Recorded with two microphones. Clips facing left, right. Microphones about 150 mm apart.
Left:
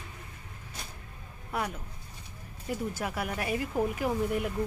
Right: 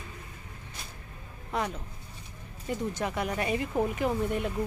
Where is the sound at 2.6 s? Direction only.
5° left (ahead or behind).